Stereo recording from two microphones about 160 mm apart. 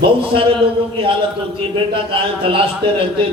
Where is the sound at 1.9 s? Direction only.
35° right (ahead or behind).